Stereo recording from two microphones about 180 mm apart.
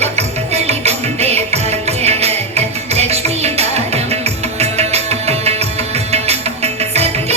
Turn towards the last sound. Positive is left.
turn(degrees=-35)  # may be behind; listen again after turning